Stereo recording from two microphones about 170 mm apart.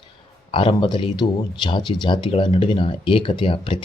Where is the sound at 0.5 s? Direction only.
30° left (ahead or behind).